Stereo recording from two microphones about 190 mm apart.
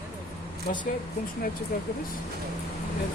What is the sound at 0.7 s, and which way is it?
Speech, 50° left (ahead or behind).